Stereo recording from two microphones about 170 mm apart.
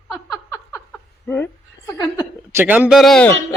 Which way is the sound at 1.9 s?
20° left (ahead or behind).